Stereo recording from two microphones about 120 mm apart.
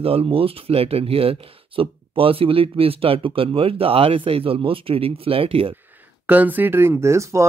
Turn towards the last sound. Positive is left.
turn(degrees=-25)  # may be behind; listen again after turning